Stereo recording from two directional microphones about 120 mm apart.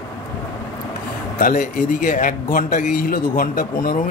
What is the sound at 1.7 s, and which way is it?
Speech, 90° left.